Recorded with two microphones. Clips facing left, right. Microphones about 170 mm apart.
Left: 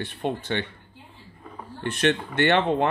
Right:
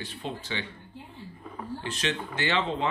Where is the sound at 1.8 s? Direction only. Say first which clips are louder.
Left 10 dB; 60° left (ahead or behind).